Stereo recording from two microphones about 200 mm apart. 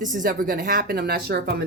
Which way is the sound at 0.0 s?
40° right (ahead or behind).